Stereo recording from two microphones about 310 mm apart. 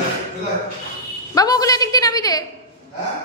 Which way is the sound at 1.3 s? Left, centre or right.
Centre.